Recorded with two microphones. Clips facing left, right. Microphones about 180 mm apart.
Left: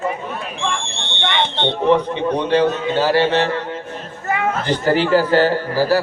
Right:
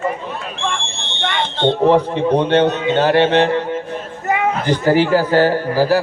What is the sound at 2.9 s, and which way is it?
Music, 20° right (ahead or behind).